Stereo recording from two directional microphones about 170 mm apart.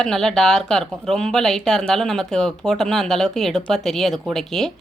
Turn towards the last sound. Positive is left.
turn(degrees=0)  # may be behind; listen again after turning